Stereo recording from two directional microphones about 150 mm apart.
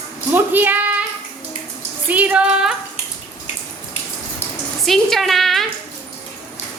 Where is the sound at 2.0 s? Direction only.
10° right (ahead or behind).